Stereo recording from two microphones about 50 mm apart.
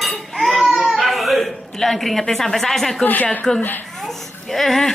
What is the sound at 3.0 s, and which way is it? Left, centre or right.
Speech, left.